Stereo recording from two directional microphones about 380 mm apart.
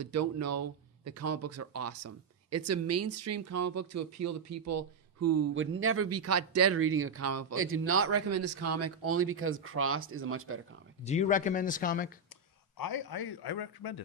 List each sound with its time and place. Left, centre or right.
0.0 s speech: right
11.0 s speech: centre
12.7 s a man's voice: left